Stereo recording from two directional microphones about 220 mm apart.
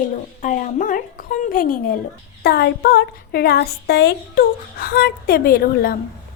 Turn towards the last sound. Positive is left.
turn(degrees=45)  # may be behind; listen again after turning